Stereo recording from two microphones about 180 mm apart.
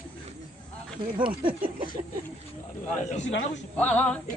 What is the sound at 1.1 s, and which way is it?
Speech, 30° right (ahead or behind).